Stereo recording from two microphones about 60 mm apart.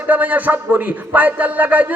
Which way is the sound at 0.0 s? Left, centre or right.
Right.